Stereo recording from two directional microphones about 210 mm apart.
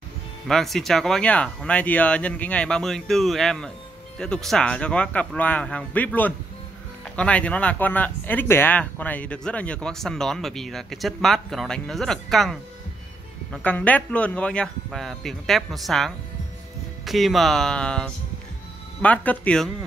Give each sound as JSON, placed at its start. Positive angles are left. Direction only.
{"t": 0.5, "sound": "speech", "side_deg": 0}